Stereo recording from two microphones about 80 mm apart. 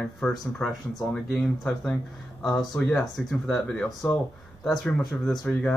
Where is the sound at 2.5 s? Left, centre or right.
Centre.